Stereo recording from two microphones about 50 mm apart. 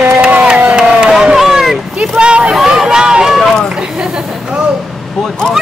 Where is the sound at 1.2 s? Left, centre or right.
Centre.